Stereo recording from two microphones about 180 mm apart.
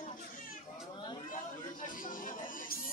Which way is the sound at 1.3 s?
50° left (ahead or behind).